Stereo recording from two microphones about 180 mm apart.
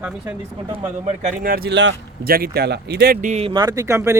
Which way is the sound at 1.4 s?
55° right (ahead or behind).